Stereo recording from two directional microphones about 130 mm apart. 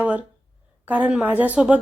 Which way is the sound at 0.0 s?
10° right (ahead or behind).